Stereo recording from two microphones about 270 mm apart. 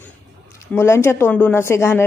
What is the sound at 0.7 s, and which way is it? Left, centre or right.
Speech, centre.